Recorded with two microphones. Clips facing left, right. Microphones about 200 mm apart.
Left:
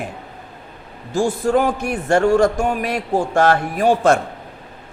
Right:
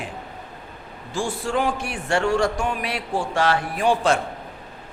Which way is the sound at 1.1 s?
40° left (ahead or behind).